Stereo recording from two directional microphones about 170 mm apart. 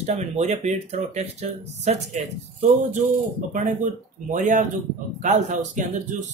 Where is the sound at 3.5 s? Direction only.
50° right (ahead or behind).